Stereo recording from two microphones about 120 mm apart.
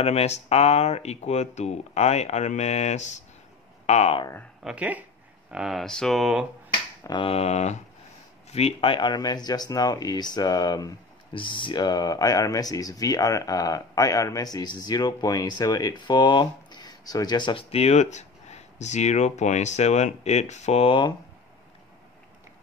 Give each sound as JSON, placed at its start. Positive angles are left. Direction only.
{"t": 0.0, "sound": "speech", "side_deg": 60}
{"t": 4.6, "sound": "speech", "side_deg": -10}
{"t": 7.0, "sound": "finger snapping", "side_deg": 35}
{"t": 7.2, "sound": "speech", "side_deg": 65}
{"t": 8.5, "sound": "speech", "side_deg": 60}
{"t": 8.9, "sound": "speech", "side_deg": 35}